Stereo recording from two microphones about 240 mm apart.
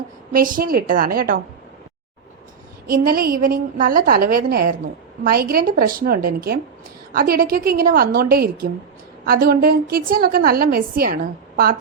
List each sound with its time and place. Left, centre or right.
0.3 s a woman's voice: right
2.8 s a woman's voice: right